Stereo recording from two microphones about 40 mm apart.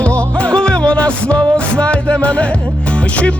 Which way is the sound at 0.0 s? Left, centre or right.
Left.